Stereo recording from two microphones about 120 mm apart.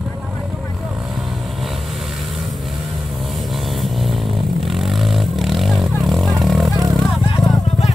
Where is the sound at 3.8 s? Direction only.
Centre (ahead or behind).